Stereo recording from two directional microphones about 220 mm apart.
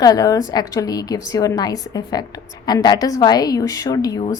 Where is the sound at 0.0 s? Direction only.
15° left (ahead or behind).